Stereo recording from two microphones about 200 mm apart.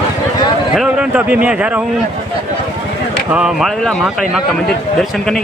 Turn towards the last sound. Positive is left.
turn(degrees=5)  # may be behind; listen again after turning